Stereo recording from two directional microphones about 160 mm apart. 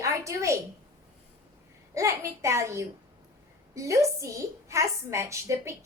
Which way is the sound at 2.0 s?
20° right (ahead or behind).